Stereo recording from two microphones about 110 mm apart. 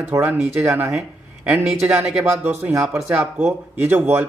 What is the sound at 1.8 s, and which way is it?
A man's voice, 10° right (ahead or behind).